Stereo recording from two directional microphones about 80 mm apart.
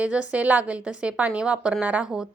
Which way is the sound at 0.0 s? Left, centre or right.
Centre.